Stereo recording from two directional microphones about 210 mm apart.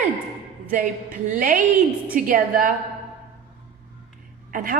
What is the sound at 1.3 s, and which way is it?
A woman's voice, 40° right (ahead or behind).